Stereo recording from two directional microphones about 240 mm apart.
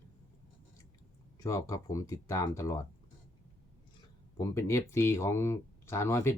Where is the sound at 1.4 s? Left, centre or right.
Centre.